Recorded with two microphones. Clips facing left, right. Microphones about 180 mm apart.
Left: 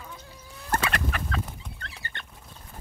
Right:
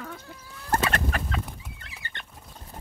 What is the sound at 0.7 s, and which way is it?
Fowl, 40° right (ahead or behind).